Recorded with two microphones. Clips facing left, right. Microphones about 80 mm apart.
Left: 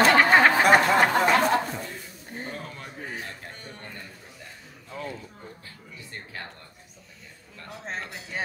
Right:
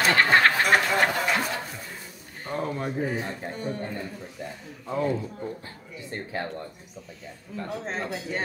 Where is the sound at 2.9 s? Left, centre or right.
Centre.